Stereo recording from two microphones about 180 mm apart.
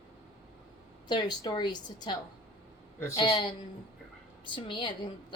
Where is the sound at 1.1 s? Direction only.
25° left (ahead or behind).